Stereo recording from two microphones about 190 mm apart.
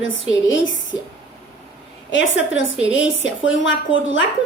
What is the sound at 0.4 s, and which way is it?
Speech, 80° left.